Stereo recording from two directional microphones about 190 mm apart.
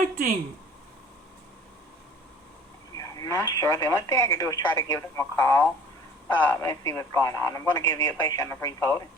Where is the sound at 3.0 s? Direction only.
20° left (ahead or behind).